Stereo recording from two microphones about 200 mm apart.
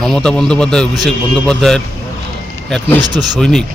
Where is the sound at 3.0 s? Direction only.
20° right (ahead or behind).